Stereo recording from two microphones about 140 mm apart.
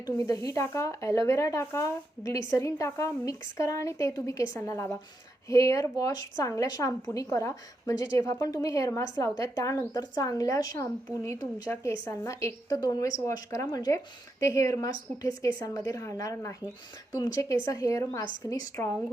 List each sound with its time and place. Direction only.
0.3 s speech: 25° left (ahead or behind)